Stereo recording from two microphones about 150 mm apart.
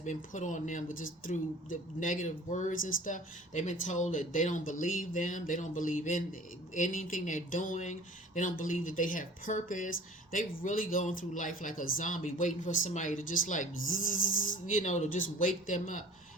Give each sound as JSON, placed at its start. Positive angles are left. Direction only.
{"t": 0.0, "sound": "speech", "side_deg": 55}